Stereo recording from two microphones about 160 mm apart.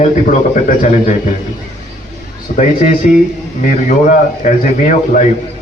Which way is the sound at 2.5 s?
50° left (ahead or behind).